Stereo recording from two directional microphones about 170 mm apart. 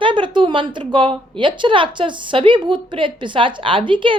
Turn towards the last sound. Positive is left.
turn(degrees=-30)  # may be behind; listen again after turning